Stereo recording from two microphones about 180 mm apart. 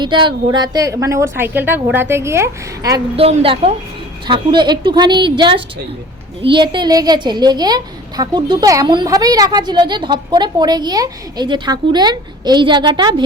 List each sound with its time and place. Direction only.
0.0 s a woman's voice: 25° right (ahead or behind)
3.2 s a woman's voice: 35° right (ahead or behind)